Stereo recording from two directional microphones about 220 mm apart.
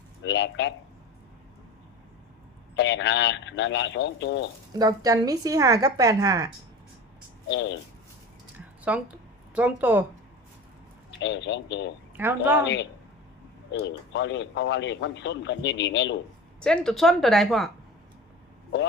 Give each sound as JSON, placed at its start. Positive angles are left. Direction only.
{"t": 0.2, "sound": "speech", "side_deg": 55}
{"t": 2.7, "sound": "speech", "side_deg": 55}
{"t": 4.7, "sound": "a woman's voice", "side_deg": -15}
{"t": 7.4, "sound": "speech", "side_deg": 55}
{"t": 8.8, "sound": "a woman's voice", "side_deg": -5}
{"t": 11.2, "sound": "speech", "side_deg": 55}
{"t": 12.1, "sound": "a woman's voice", "side_deg": -10}
{"t": 12.6, "sound": "speech", "side_deg": 55}
{"t": 16.6, "sound": "speech", "side_deg": 5}